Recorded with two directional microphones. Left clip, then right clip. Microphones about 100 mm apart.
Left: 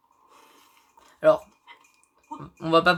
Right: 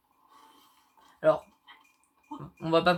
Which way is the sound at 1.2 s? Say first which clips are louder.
Left 5 dB; 90° left.